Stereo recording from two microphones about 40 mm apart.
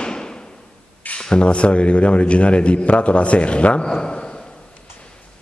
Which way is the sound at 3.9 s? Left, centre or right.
Centre.